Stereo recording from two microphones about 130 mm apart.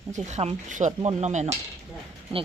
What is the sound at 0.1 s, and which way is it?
Speech, 65° right (ahead or behind).